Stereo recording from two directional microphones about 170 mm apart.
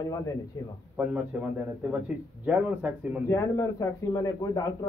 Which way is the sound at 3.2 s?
20° left (ahead or behind).